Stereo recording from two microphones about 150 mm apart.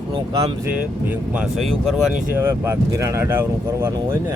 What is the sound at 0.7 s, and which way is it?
Speech, 10° right (ahead or behind).